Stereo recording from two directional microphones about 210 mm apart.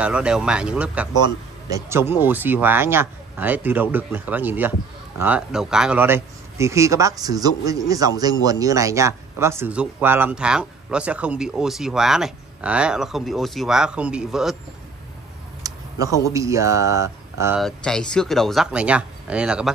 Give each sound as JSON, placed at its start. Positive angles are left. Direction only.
{"t": 0.0, "sound": "a man's voice", "side_deg": -5}
{"t": 15.7, "sound": "a sound", "side_deg": -15}
{"t": 16.3, "sound": "speech", "side_deg": -15}
{"t": 17.6, "sound": "speech", "side_deg": 0}